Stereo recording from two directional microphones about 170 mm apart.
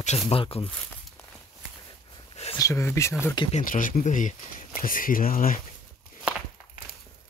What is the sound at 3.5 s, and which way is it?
Speech, 50° left (ahead or behind).